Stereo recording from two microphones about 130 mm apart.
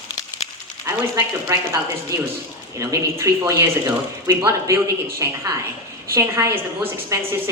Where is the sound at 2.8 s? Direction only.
25° right (ahead or behind).